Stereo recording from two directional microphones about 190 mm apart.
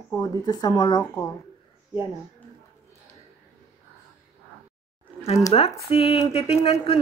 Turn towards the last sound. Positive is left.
turn(degrees=30)  # may be behind; listen again after turning